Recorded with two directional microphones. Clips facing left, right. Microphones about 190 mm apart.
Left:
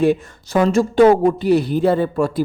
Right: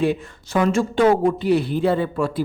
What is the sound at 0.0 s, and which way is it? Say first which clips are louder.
A woman's voice: left 5 dB; 40° left (ahead or behind).